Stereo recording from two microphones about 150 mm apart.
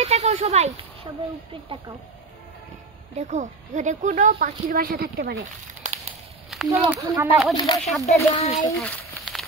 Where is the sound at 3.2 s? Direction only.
50° right (ahead or behind); by 5.3 s 85° right.